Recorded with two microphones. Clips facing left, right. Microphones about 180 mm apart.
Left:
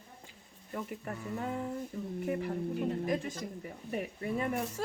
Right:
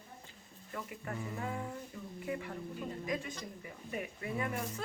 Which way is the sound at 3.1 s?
45° left (ahead or behind).